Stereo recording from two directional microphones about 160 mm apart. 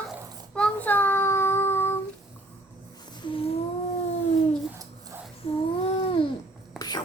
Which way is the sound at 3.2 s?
35° left (ahead or behind).